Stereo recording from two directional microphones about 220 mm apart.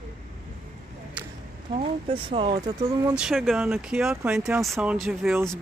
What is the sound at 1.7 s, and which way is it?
Speech, 25° right (ahead or behind).